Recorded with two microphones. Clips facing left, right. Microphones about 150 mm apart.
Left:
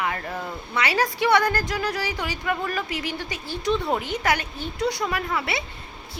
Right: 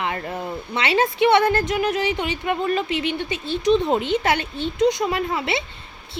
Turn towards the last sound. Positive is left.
turn(degrees=-25)  # may be behind; listen again after turning